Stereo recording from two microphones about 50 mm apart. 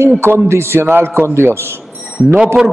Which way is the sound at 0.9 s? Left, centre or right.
Right.